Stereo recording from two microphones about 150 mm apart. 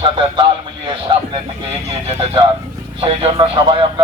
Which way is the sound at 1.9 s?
40° right (ahead or behind).